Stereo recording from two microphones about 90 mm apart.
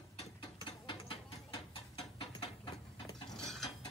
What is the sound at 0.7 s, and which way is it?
Mechanisms, 70° left (ahead or behind).